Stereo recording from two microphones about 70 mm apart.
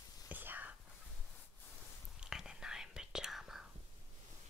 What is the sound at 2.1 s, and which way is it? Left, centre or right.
Whispering, centre.